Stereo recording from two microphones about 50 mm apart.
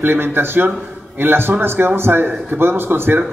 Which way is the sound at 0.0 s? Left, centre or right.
Right.